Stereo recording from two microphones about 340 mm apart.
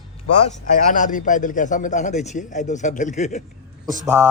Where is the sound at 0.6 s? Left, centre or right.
Left.